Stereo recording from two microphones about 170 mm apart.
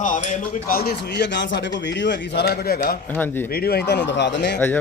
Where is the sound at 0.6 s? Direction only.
60° left (ahead or behind).